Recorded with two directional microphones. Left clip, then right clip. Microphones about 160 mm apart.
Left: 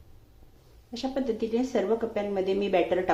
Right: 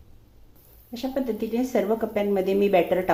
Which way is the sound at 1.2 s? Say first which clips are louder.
Right 1 dB; 15° right (ahead or behind).